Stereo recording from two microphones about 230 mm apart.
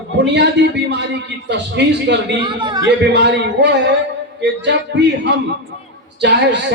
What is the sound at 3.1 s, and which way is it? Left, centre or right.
A man's voice, right.